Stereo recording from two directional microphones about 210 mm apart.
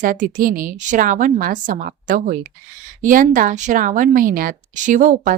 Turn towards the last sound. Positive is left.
turn(degrees=-40)  # may be behind; listen again after turning